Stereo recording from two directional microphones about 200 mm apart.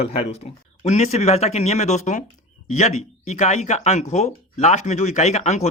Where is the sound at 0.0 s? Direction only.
30° left (ahead or behind).